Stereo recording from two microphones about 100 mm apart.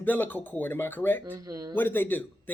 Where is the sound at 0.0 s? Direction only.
15° left (ahead or behind).